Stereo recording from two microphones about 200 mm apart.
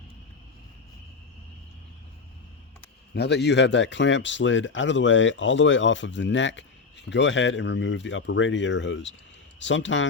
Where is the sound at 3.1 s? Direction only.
60° left (ahead or behind).